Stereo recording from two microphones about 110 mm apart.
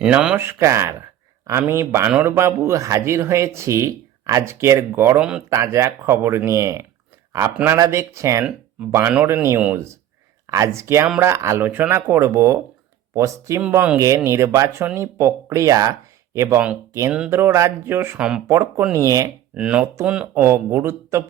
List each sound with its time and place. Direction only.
0.0 s speech: 10° right (ahead or behind)
0.3 s speech: 25° right (ahead or behind)
2.3 s speech: 25° right (ahead or behind)
18.2 s speech: 5° right (ahead or behind)
18.4 s speech: 25° right (ahead or behind)
19.5 s speech: 10° right (ahead or behind)
20.4 s speech: 20° right (ahead or behind)